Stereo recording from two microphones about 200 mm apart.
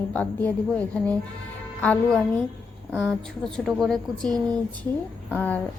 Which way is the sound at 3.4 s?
Centre (ahead or behind).